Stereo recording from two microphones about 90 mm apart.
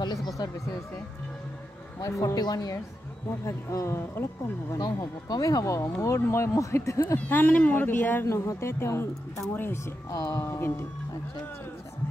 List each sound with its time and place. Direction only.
0.0 s a sound: 50° left (ahead or behind)
2.0 s speech: 40° left (ahead or behind)
3.4 s speech: 30° left (ahead or behind)
4.7 s speech: 45° left (ahead or behind)
7.2 s speech: 20° left (ahead or behind)
8.3 s speech: 30° left (ahead or behind)